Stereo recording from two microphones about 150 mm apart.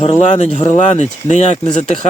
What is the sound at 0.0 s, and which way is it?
Speech, 40° left (ahead or behind).